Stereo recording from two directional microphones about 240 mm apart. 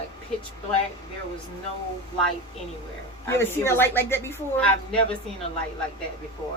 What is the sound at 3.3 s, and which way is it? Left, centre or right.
Speech, centre.